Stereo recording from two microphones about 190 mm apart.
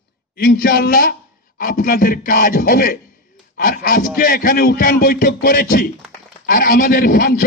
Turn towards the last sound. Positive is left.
turn(degrees=55)  # may be behind; listen again after turning